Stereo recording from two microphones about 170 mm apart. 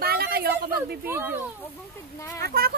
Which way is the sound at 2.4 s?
65° right (ahead or behind).